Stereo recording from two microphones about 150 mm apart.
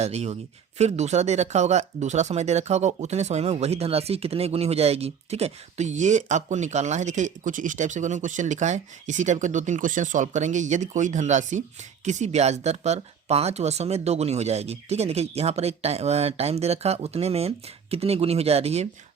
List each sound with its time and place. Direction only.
0.0 s speech: 45° right (ahead or behind)